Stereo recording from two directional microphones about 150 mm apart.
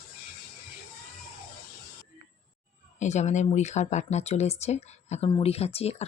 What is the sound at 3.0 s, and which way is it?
Speech, 50° left (ahead or behind).